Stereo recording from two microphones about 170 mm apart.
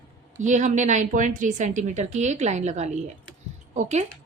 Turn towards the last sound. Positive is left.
turn(degrees=-40)  # may be behind; listen again after turning